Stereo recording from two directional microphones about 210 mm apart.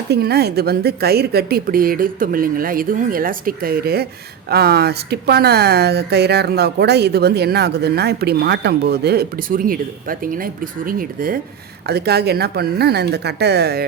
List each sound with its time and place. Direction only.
0.1 s speech: 50° right (ahead or behind)